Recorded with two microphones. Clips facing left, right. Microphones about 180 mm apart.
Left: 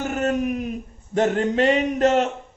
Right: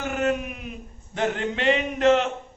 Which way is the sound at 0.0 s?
40° left (ahead or behind).